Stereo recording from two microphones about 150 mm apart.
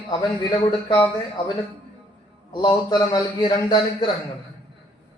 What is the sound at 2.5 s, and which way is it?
A man's voice, 30° left (ahead or behind).